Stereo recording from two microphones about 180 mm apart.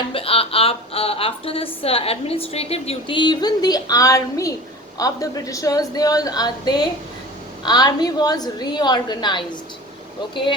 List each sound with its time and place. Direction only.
0.1 s a woman's voice: 30° left (ahead or behind)